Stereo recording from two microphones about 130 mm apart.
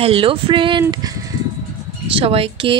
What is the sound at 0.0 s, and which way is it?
Speech, 45° right (ahead or behind).